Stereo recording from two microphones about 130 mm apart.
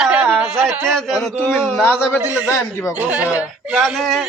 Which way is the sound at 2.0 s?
10° right (ahead or behind).